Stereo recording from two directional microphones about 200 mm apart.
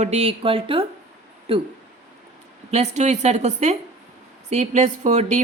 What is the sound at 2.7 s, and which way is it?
Speech, 35° right (ahead or behind).